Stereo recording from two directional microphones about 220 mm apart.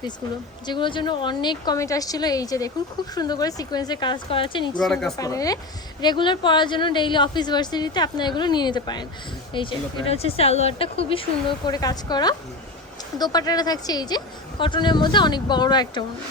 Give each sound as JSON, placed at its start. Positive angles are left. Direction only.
{"t": 0.7, "sound": "a woman's voice", "side_deg": 20}
{"t": 4.8, "sound": "a woman's voice", "side_deg": 0}
{"t": 5.1, "sound": "a woman's voice", "side_deg": 15}